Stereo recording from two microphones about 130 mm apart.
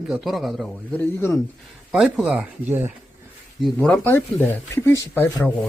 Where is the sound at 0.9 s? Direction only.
15° left (ahead or behind).